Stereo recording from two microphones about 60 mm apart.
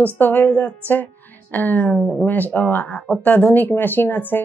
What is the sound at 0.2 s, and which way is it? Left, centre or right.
A woman's voice, left.